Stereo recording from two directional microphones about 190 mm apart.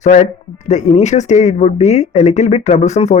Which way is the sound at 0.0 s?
40° left (ahead or behind).